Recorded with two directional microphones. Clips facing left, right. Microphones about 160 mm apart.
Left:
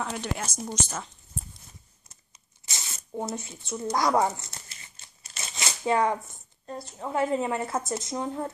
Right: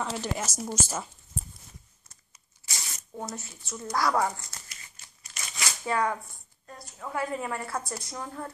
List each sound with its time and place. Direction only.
0.2 s a woman's voice: 5° right (ahead or behind)
2.6 s speech: 20° left (ahead or behind)